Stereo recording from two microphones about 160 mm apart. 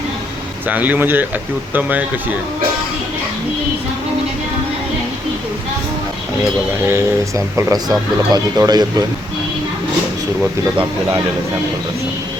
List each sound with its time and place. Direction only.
0.7 s speech: 10° right (ahead or behind)
6.4 s speech: 15° right (ahead or behind)